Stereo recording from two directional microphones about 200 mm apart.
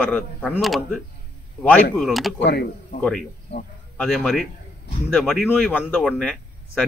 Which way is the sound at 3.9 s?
Centre (ahead or behind).